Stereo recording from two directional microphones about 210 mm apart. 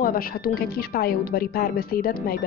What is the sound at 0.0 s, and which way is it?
A woman's voice, 45° left (ahead or behind).